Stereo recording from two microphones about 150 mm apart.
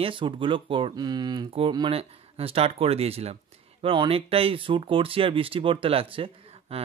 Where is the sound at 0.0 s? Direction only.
35° right (ahead or behind).